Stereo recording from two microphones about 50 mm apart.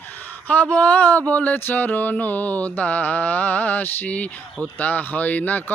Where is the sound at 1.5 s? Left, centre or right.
Left.